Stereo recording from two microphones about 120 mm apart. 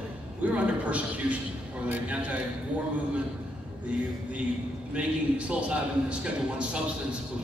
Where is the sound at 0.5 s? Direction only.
10° right (ahead or behind).